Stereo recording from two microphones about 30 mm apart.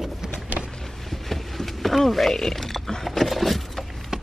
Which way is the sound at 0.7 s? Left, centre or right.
Centre.